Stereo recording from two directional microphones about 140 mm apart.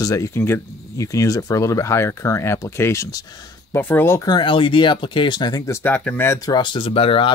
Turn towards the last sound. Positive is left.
turn(degrees=40)  # may be behind; listen again after turning